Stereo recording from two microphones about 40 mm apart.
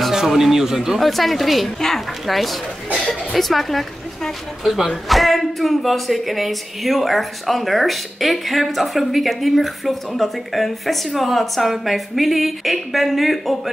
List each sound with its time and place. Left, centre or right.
0.3 s speech: centre
3.0 s a sound: centre
3.3 s speech: centre